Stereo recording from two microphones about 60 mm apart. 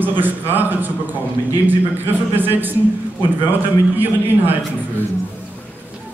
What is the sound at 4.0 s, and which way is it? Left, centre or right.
Speech, right.